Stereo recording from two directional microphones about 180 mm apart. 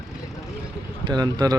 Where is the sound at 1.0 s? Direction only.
20° right (ahead or behind).